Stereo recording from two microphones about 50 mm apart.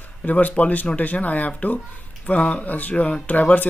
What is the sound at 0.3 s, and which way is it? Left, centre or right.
Speech, left.